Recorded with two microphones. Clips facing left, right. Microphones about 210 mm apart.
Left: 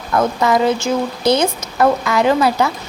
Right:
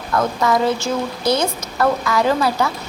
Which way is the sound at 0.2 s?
20° left (ahead or behind).